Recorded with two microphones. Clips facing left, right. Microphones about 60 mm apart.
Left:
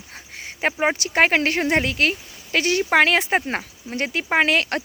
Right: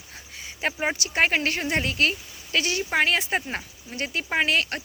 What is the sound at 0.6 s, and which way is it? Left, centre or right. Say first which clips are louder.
Speech: left 5 dB; left.